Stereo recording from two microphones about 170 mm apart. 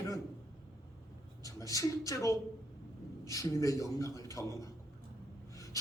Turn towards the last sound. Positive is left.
turn(degrees=20)  # may be behind; listen again after turning